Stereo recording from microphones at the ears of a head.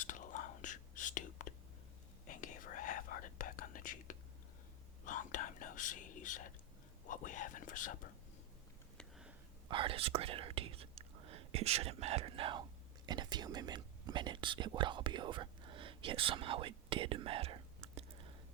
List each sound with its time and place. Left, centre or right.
0.0 s whispering: left
7.0 s speech: left
9.6 s speech: right